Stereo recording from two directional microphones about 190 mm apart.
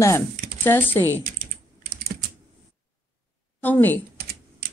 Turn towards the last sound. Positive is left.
turn(degrees=10)  # may be behind; listen again after turning